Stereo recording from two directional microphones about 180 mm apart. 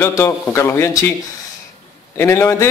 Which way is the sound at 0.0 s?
15° left (ahead or behind).